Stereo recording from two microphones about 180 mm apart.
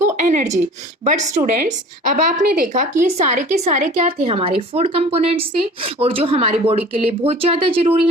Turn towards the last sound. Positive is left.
turn(degrees=-30)  # may be behind; listen again after turning